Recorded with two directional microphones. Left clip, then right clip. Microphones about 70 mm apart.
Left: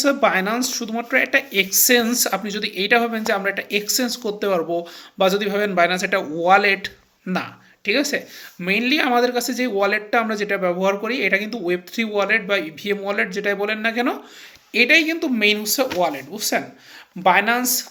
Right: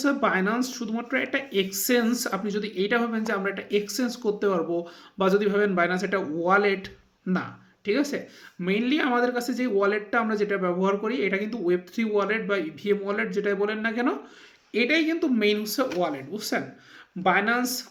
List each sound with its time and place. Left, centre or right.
0.0 s speech: right
8.6 s speech: right